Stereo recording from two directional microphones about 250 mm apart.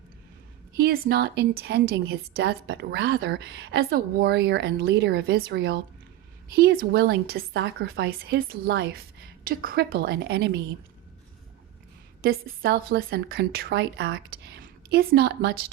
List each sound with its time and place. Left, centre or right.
0.7 s speech: right
12.2 s speech: right